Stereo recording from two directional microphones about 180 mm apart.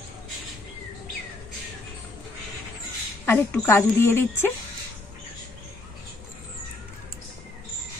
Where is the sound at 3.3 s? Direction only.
15° left (ahead or behind).